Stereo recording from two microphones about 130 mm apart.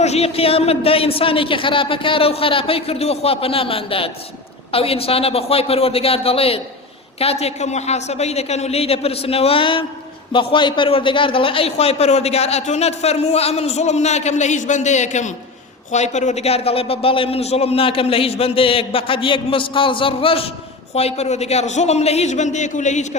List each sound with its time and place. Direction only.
0.0 s a man's voice: 55° left (ahead or behind)